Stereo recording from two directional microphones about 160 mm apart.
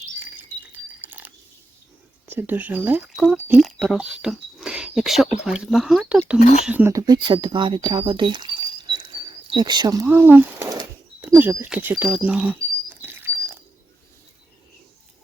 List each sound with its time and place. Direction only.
0.2 s a sound: 10° right (ahead or behind)
2.2 s speech: 10° right (ahead or behind)
6.4 s speech: 50° left (ahead or behind)
6.7 s speech: 15° right (ahead or behind)
10.1 s speech: 10° right (ahead or behind)
12.0 s a sound: 5° right (ahead or behind)